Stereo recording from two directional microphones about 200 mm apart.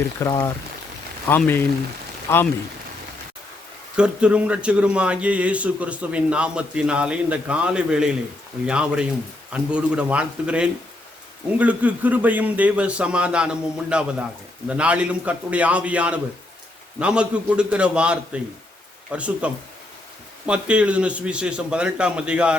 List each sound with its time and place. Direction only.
0.2 s speech: 10° left (ahead or behind)
3.9 s a man's voice: 5° right (ahead or behind)
20.5 s a man's voice: 5° right (ahead or behind)